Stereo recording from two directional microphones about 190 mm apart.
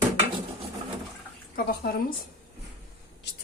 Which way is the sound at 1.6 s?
55° left (ahead or behind).